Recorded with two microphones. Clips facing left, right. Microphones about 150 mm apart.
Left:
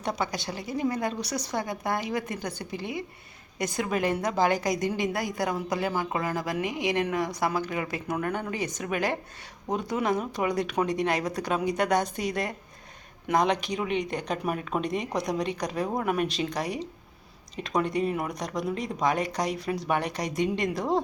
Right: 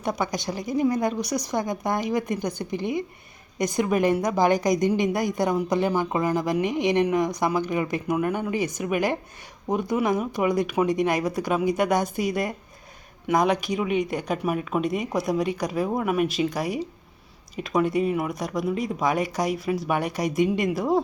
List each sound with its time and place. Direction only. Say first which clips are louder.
0.0 s speech: right 3 dB; 15° right (ahead or behind)